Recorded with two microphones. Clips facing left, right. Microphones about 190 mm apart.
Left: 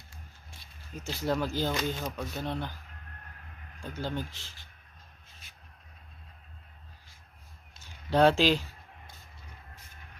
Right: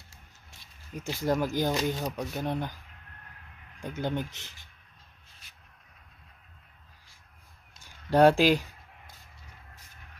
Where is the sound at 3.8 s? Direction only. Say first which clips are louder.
Right 3 dB; 20° right (ahead or behind).